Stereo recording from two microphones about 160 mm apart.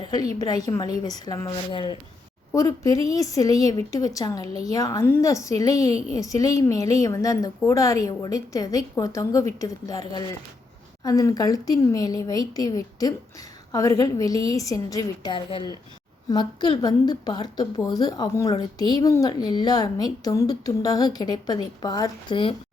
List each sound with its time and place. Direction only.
0.3 s a woman's voice: 25° left (ahead or behind)